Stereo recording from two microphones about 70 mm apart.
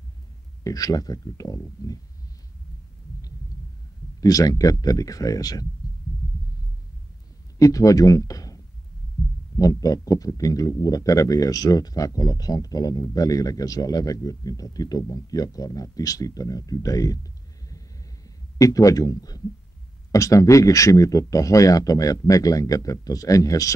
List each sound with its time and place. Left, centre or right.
0.7 s speech: left
4.2 s speech: left
7.5 s speech: left
9.6 s speech: left
20.1 s speech: left